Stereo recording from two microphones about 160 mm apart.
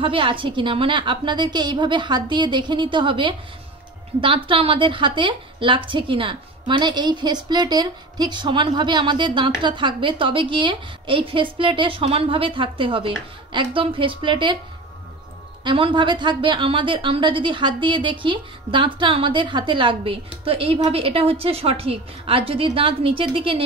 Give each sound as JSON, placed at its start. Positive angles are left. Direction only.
{"t": 0.0, "sound": "a woman's voice", "side_deg": -30}
{"t": 15.6, "sound": "a woman's voice", "side_deg": -30}